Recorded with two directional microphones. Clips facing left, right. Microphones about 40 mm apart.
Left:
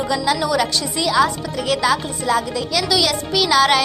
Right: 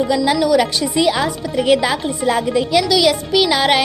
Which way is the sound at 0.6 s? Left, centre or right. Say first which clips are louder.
Right 4 dB; centre.